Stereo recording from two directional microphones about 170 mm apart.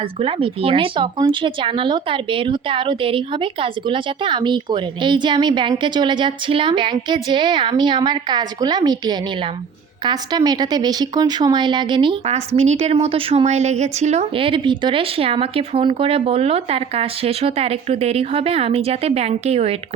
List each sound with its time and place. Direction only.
0.2 s speech: 35° right (ahead or behind)
12.5 s speech: 40° right (ahead or behind)